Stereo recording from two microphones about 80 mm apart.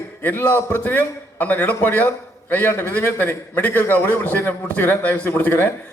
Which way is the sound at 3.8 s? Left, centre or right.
Left.